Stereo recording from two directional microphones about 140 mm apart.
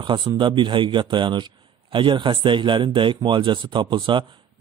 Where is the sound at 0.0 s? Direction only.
35° right (ahead or behind).